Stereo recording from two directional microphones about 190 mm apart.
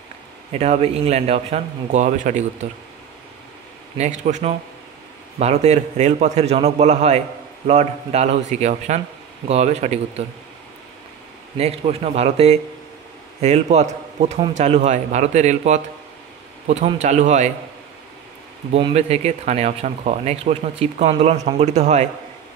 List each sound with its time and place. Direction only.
0.5 s a man's voice: 35° right (ahead or behind)
4.0 s a man's voice: 35° right (ahead or behind)
11.5 s a man's voice: 35° right (ahead or behind)
18.7 s a man's voice: 35° right (ahead or behind)